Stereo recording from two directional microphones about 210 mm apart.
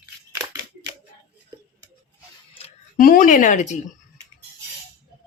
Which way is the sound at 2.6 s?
30° left (ahead or behind).